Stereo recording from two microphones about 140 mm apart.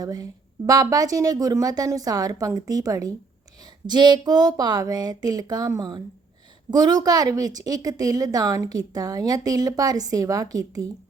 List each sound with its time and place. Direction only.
0.0 s a woman's voice: 25° right (ahead or behind)